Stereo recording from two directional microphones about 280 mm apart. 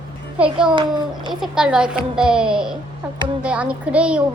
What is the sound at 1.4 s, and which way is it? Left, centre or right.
A child's voice, centre.